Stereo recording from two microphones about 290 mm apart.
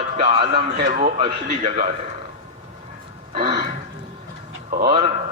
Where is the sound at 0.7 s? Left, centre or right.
Right.